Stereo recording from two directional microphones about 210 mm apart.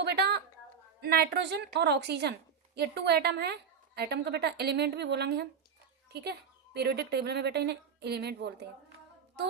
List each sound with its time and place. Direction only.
0.0 s a sound: 50° right (ahead or behind)
1.0 s a woman's voice: 50° right (ahead or behind)
6.7 s a woman's voice: 50° right (ahead or behind)